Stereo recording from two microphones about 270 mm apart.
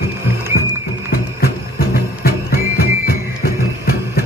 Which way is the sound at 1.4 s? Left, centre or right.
Left.